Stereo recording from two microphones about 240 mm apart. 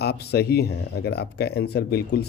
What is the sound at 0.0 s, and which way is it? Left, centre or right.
Speech, left.